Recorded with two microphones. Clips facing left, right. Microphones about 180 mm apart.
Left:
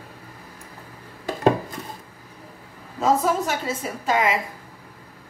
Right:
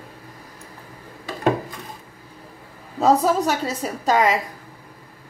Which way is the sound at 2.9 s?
40° right (ahead or behind).